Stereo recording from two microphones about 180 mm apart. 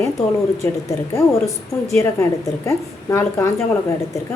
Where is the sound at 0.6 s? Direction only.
15° left (ahead or behind).